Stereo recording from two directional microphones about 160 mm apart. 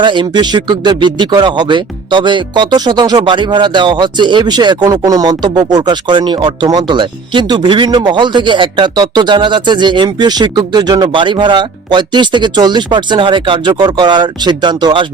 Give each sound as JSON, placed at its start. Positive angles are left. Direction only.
{"t": 0.0, "sound": "speech", "side_deg": -30}